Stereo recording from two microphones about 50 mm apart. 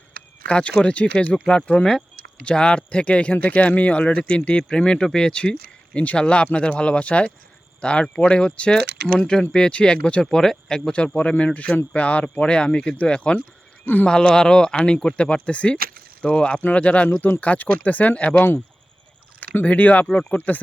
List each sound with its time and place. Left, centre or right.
0.4 s speech: left
10.2 s speech: centre
13.8 s speech: left
14.1 s speech: centre
17.1 s speech: left
17.4 s speech: left
19.6 s speech: left